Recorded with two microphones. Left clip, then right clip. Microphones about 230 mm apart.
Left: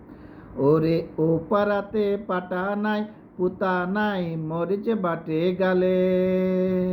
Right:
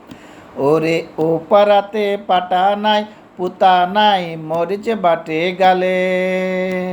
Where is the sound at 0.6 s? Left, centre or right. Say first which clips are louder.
Right 6 dB; centre.